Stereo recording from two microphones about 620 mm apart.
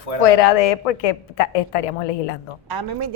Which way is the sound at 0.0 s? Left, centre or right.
Left.